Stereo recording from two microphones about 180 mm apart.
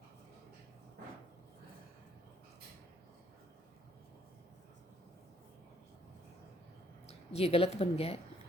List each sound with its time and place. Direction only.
7.1 s speech: 35° left (ahead or behind)